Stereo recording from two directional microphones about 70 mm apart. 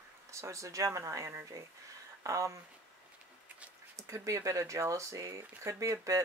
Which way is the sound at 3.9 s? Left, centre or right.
Right.